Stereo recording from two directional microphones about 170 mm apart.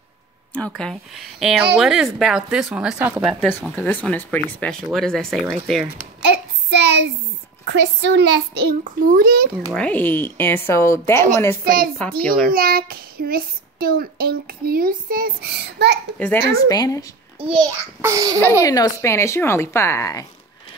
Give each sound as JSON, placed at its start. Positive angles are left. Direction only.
{"t": 0.6, "sound": "speech", "side_deg": 5}
{"t": 3.7, "sound": "speech", "side_deg": 10}
{"t": 6.7, "sound": "a child's voice", "side_deg": -90}
{"t": 8.8, "sound": "a child's voice", "side_deg": -60}
{"t": 9.8, "sound": "speech", "side_deg": 10}
{"t": 11.6, "sound": "a child's voice", "side_deg": -60}
{"t": 12.0, "sound": "speech", "side_deg": 5}
{"t": 12.4, "sound": "a child's voice", "side_deg": -60}
{"t": 16.6, "sound": "speech", "side_deg": 20}
{"t": 17.4, "sound": "a child's voice", "side_deg": -25}
{"t": 18.4, "sound": "speech", "side_deg": 15}